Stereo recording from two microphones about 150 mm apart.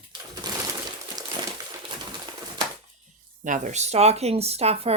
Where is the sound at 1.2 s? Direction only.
25° right (ahead or behind).